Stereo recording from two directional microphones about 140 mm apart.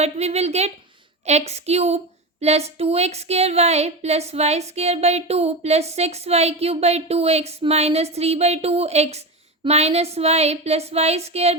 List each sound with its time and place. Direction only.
0.0 s speech: 50° right (ahead or behind)